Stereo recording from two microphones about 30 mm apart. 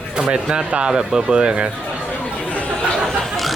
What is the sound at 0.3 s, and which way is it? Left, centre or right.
Speech, right.